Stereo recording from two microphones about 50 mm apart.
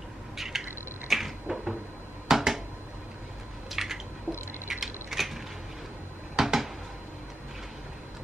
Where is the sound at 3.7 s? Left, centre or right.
Centre.